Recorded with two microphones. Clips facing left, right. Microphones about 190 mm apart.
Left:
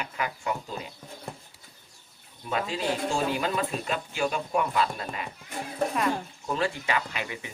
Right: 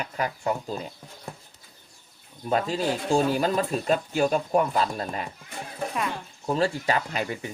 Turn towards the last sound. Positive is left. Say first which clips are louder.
# right 5 dB
turn(degrees=-40)  # may be behind; listen again after turning